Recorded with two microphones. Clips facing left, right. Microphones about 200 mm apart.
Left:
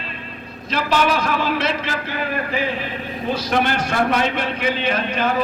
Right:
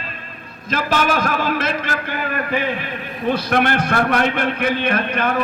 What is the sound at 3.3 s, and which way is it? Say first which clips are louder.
A man's voice: right 2 dB; 60° right (ahead or behind).